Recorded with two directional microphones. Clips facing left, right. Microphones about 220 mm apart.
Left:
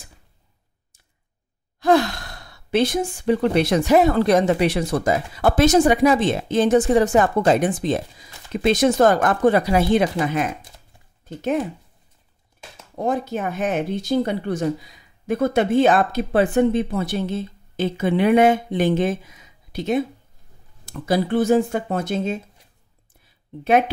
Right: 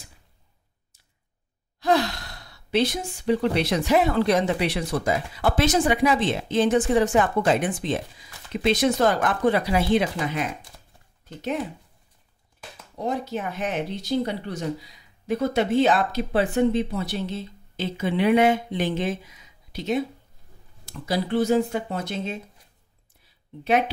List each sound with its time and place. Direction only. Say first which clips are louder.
1.8 s speech: left 5 dB; 50° left (ahead or behind)
12.9 s speech: left 4 dB; 50° left (ahead or behind)
23.2 s a sound: left 4 dB; 50° left (ahead or behind)